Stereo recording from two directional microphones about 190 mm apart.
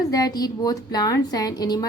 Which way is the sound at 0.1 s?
20° left (ahead or behind).